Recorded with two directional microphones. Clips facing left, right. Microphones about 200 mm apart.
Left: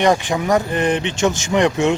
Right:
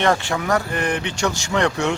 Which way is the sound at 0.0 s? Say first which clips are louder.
Left 3 dB; 15° left (ahead or behind).